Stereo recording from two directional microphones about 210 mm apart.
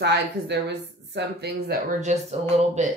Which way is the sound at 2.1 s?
35° right (ahead or behind).